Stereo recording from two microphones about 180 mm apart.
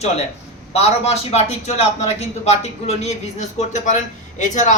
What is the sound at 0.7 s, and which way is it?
A man's voice, 35° left (ahead or behind).